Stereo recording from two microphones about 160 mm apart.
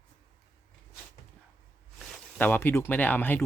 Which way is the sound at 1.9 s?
10° left (ahead or behind).